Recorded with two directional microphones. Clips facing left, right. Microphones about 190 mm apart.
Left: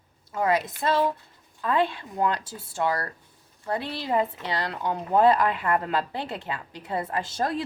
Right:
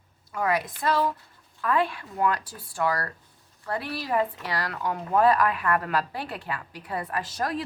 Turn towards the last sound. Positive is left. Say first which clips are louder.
# left 2 dB
turn(degrees=25)  # may be behind; listen again after turning